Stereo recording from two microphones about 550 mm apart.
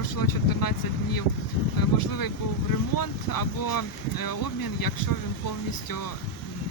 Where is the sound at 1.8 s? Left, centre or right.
Left.